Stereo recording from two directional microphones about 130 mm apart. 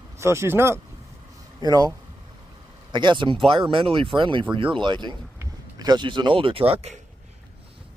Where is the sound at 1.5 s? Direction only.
30° right (ahead or behind).